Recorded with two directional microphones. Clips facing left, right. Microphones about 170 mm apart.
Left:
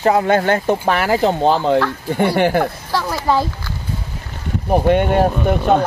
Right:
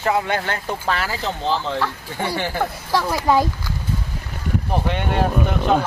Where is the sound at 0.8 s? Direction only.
60° left (ahead or behind).